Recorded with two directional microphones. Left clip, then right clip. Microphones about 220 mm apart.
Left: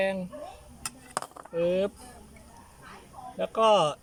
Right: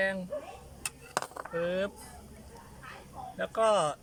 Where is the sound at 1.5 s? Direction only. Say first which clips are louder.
Left 5 dB; 10° left (ahead or behind).